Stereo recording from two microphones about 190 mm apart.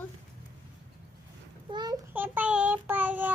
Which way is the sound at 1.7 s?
20° right (ahead or behind).